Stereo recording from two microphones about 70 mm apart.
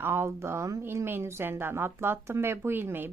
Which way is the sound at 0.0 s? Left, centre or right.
Right.